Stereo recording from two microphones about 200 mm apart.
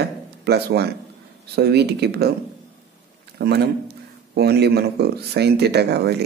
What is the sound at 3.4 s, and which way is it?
Speech, 55° right (ahead or behind).